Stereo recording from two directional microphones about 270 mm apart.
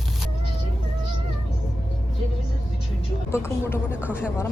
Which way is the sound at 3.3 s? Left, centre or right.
Centre.